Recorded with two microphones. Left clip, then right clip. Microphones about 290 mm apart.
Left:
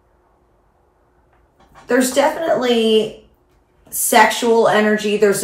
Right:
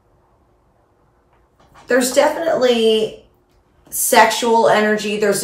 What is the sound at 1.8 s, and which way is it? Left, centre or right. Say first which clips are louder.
A woman's voice: right 1 dB; centre.